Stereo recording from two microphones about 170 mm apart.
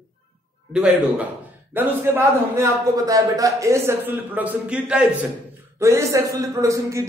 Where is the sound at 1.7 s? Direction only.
15° right (ahead or behind).